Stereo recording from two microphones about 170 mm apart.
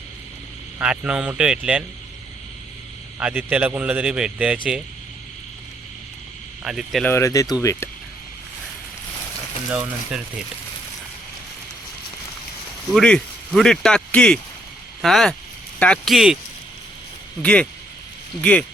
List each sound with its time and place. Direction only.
0.8 s speech: 5° right (ahead or behind)
3.2 s a man's voice: 5° right (ahead or behind)
6.7 s speech: 5° right (ahead or behind)
7.0 s speech: 15° left (ahead or behind)
12.9 s speech: 5° left (ahead or behind)
17.4 s speech: 5° left (ahead or behind)